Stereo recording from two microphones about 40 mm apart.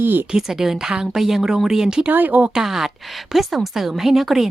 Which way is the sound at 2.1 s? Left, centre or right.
Right.